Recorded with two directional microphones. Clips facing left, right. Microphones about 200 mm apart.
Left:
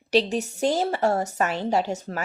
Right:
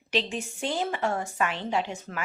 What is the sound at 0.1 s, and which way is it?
A woman's voice, 40° left (ahead or behind).